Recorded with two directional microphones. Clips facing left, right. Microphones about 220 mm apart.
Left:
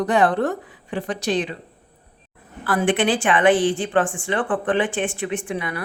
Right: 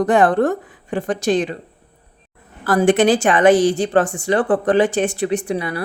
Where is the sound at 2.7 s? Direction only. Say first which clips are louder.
Right 6 dB; 40° right (ahead or behind).